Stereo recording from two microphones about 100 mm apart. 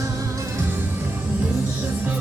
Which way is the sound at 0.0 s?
30° right (ahead or behind).